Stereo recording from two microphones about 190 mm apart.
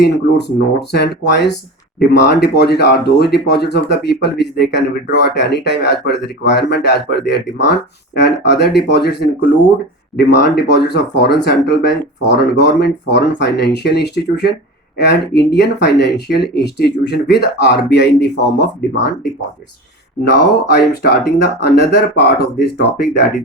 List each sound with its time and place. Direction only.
0.3 s speech: 65° left (ahead or behind)
20.2 s speech: 60° left (ahead or behind)